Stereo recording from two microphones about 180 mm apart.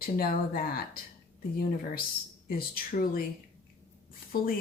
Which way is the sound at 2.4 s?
55° left (ahead or behind).